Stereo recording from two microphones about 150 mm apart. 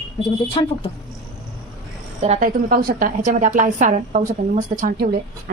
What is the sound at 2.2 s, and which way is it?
Speech, 45° right (ahead or behind).